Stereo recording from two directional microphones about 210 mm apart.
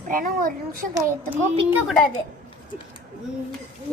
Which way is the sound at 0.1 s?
40° right (ahead or behind).